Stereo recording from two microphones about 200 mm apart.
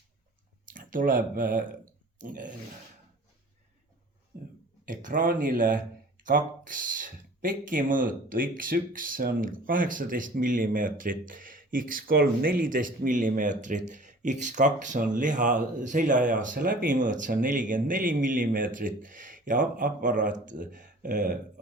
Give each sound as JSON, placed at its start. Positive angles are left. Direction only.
{"t": 0.7, "sound": "speech", "side_deg": -45}
{"t": 4.9, "sound": "speech", "side_deg": -40}